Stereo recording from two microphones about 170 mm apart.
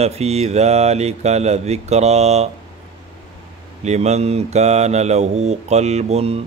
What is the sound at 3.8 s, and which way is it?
Mantra, 40° right (ahead or behind).